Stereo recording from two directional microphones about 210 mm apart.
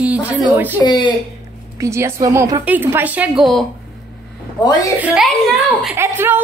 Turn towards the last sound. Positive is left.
turn(degrees=-10)  # may be behind; listen again after turning